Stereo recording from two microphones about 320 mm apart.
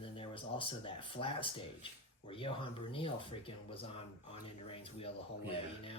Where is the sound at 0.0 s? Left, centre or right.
Centre.